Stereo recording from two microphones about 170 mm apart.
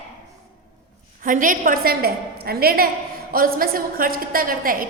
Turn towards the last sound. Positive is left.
turn(degrees=-55)  # may be behind; listen again after turning